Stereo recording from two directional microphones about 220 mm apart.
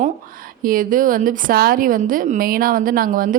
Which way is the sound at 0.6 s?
40° right (ahead or behind).